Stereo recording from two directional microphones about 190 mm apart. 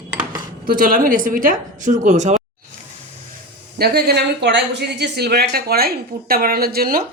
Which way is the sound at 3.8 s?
55° right (ahead or behind).